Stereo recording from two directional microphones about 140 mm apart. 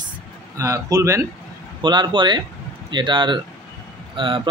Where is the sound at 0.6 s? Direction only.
25° right (ahead or behind).